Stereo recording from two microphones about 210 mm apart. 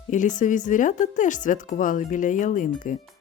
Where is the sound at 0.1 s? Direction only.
35° left (ahead or behind).